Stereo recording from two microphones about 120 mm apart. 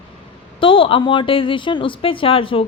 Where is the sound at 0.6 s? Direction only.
45° left (ahead or behind).